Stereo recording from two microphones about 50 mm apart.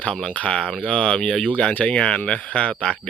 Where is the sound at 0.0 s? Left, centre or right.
Centre.